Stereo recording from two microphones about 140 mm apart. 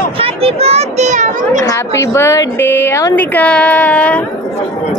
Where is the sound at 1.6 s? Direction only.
20° left (ahead or behind).